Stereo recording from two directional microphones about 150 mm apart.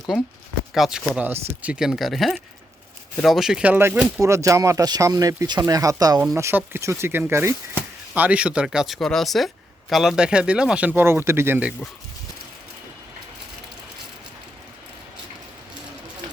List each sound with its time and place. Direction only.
0.7 s speech: 5° right (ahead or behind)